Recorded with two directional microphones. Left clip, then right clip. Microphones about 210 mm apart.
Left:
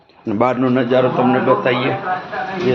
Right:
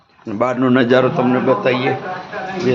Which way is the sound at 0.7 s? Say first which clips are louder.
Right 2 dB; 45° right (ahead or behind).